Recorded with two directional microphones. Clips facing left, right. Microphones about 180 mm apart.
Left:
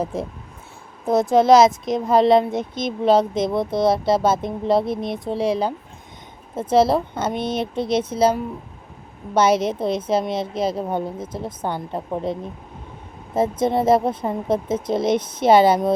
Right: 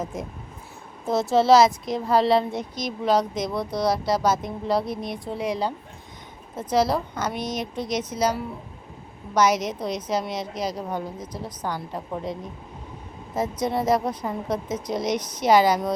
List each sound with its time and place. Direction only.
0.0 s speech: 30° left (ahead or behind)
1.0 s a child's voice: 15° left (ahead or behind)